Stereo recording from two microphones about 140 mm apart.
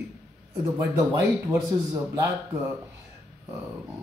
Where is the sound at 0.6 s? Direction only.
20° right (ahead or behind).